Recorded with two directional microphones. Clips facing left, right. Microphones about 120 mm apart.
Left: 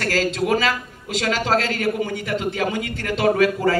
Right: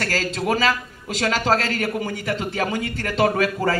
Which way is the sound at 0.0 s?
40° right (ahead or behind).